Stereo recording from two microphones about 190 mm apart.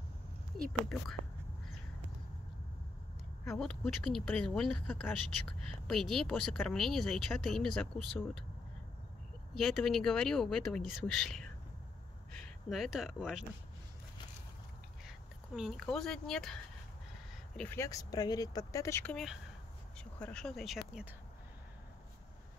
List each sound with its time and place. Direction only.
3.4 s speech: 5° left (ahead or behind)
9.5 s speech: centre (ahead or behind)
15.0 s speech: centre (ahead or behind)
17.6 s speech: 10° left (ahead or behind)